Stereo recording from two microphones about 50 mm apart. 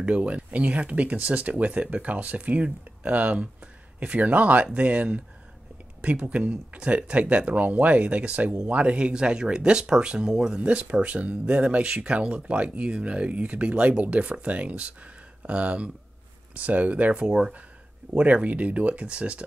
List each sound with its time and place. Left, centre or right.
0.0 s speech: right
10.6 s speech: right
17.1 s speech: centre
18.1 s speech: right